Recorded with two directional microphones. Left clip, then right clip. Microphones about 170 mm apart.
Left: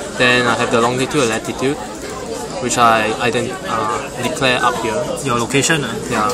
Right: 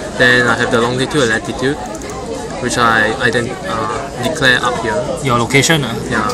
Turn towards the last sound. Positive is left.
turn(degrees=-10)  # may be behind; listen again after turning